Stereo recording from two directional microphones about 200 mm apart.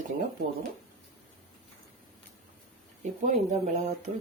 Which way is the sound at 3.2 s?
35° right (ahead or behind).